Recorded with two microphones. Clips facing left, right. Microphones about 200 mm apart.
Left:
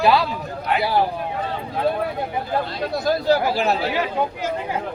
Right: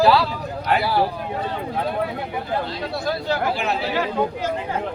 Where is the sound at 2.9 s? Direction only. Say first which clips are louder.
Left 6 dB; 40° left (ahead or behind).